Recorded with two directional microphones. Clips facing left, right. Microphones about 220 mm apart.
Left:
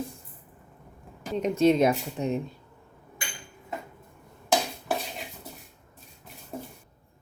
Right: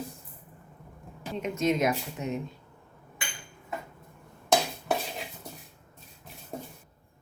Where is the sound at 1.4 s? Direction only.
30° left (ahead or behind).